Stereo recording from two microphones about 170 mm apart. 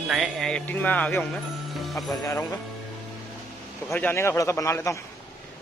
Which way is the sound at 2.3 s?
15° left (ahead or behind).